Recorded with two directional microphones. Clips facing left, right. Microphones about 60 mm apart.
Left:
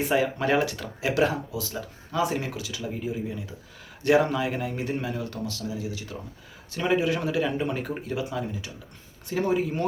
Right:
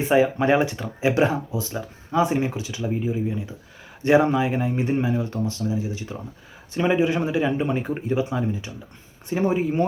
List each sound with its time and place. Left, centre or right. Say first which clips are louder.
0.1 s speech: right 7 dB; right